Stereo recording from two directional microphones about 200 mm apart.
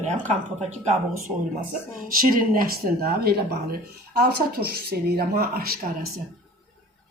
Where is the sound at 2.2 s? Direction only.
45° right (ahead or behind).